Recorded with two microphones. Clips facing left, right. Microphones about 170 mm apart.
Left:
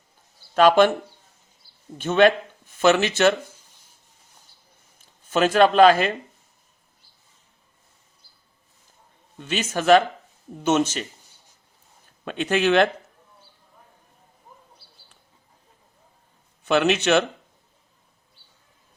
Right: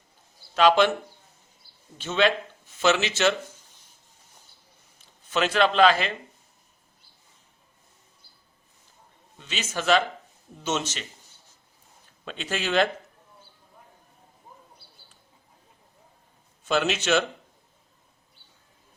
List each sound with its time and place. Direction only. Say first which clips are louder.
0.5 s a man's voice: left 4 dB; 50° left (ahead or behind)
2.0 s speech: left 6 dB; 55° left (ahead or behind)
4.9 s speech: left 5 dB; 45° left (ahead or behind)
9.4 s a man's voice: left 6 dB; 55° left (ahead or behind)
12.2 s speech: left 9 dB; 55° left (ahead or behind)
16.6 s speech: left 5 dB; 60° left (ahead or behind)